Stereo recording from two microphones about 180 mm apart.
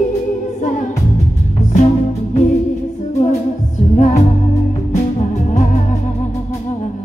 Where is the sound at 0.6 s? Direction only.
40° left (ahead or behind).